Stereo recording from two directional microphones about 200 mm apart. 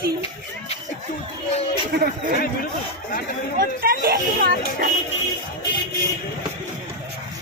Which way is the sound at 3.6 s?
50° right (ahead or behind).